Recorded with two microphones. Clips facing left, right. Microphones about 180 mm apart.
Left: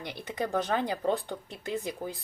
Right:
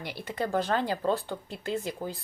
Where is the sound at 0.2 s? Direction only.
15° left (ahead or behind).